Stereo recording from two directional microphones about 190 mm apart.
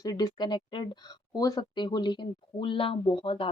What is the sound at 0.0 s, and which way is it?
Speech, 20° left (ahead or behind).